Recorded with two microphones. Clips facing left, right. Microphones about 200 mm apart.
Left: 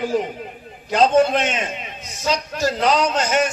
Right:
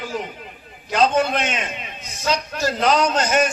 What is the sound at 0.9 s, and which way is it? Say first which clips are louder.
Speech: left 3 dB; 30° left (ahead or behind).